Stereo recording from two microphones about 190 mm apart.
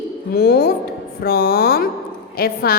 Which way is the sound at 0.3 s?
55° left (ahead or behind).